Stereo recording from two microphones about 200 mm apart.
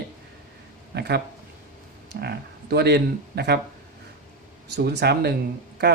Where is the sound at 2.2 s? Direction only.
50° right (ahead or behind).